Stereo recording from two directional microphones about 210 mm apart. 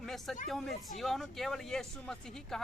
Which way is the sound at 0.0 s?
Centre (ahead or behind).